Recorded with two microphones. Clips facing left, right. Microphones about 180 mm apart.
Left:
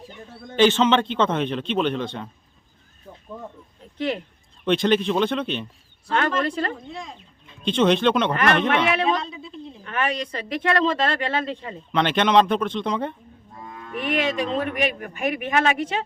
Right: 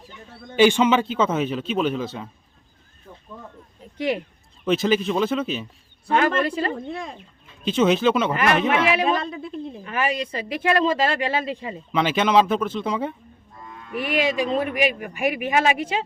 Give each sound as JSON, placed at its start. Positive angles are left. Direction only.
{"t": 0.5, "sound": "a man's voice", "side_deg": -10}
{"t": 3.9, "sound": "a man's voice", "side_deg": -10}
{"t": 6.7, "sound": "speech", "side_deg": -55}
{"t": 7.6, "sound": "a man's voice", "side_deg": -5}
{"t": 9.2, "sound": "speech", "side_deg": -55}
{"t": 9.8, "sound": "speech", "side_deg": -10}